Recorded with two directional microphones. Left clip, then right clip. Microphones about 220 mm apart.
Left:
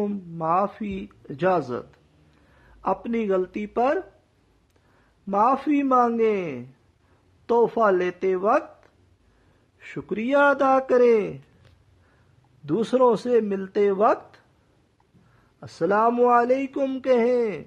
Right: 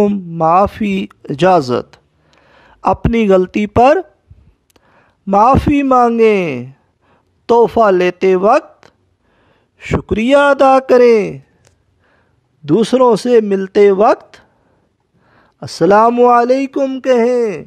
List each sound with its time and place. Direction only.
0.0 s a man's voice: 45° right (ahead or behind)
12.6 s speech: 40° right (ahead or behind)